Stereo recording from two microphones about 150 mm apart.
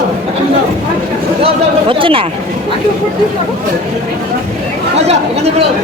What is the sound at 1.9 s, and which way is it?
Speech, 35° right (ahead or behind).